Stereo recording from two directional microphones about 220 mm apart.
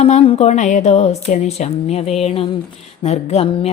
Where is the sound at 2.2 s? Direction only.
25° left (ahead or behind).